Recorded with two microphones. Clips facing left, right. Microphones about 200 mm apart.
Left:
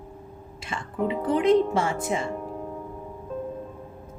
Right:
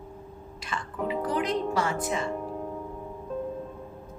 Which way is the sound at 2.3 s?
Centre (ahead or behind).